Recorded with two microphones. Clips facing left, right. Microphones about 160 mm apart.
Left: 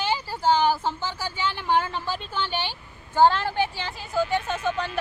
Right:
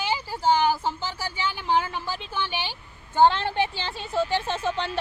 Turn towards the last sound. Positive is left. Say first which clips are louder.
# even
turn(degrees=-30)  # may be behind; listen again after turning